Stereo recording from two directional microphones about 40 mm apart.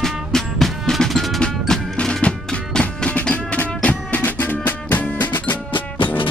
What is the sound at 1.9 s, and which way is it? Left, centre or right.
Music, centre.